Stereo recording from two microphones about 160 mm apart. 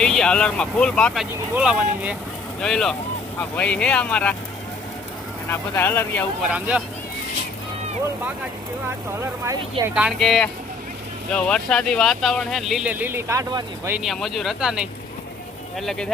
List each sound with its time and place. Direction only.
0.0 s speech: 5° left (ahead or behind)
1.3 s speech: 10° right (ahead or behind)
2.6 s speech: 5° left (ahead or behind)
5.5 s speech: 15° left (ahead or behind)
6.4 s speech: 5° right (ahead or behind)
9.4 s speech: 15° right (ahead or behind)
9.9 s speech: 5° right (ahead or behind); by 13.9 s 25° right (ahead or behind)
13.9 s speech: centre (ahead or behind)